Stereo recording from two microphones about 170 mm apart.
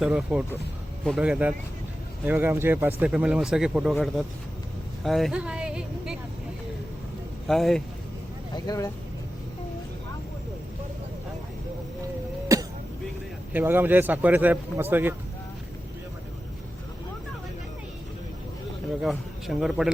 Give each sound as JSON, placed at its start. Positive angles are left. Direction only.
{"t": 0.0, "sound": "a man's voice", "side_deg": -5}
{"t": 5.0, "sound": "a sound", "side_deg": 0}
{"t": 7.4, "sound": "speech", "side_deg": 0}
{"t": 8.5, "sound": "speech", "side_deg": 20}
{"t": 12.5, "sound": "a sound", "side_deg": -20}
{"t": 13.5, "sound": "a man's voice", "side_deg": -10}
{"t": 19.0, "sound": "a man's voice", "side_deg": 0}